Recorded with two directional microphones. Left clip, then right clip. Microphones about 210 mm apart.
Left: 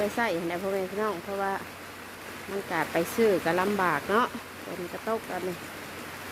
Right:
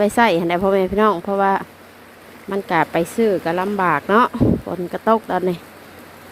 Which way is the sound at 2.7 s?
25° right (ahead or behind).